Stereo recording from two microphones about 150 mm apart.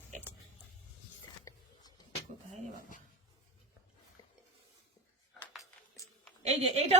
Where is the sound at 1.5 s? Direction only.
20° left (ahead or behind).